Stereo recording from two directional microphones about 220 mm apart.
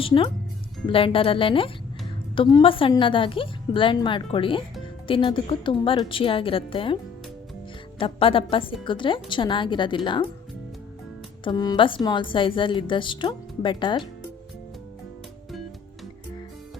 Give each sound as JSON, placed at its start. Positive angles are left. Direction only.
{"t": 0.0, "sound": "a woman's voice", "side_deg": 20}
{"t": 11.4, "sound": "a woman's voice", "side_deg": 20}